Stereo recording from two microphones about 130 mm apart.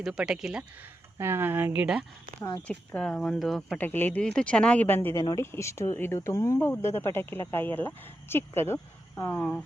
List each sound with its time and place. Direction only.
0.0 s speech: 5° right (ahead or behind)
1.2 s speech: 15° right (ahead or behind)
2.6 s speech: 10° left (ahead or behind)
3.8 s speech: 15° left (ahead or behind)